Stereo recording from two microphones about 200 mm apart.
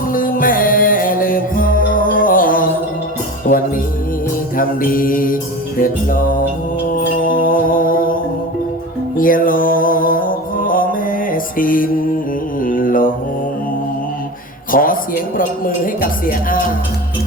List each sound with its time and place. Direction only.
0.1 s music: 45° left (ahead or behind)
4.5 s music: 45° left (ahead or behind)
9.1 s music: 45° left (ahead or behind)
12.5 s mantra: 45° left (ahead or behind)
14.7 s music: 45° left (ahead or behind)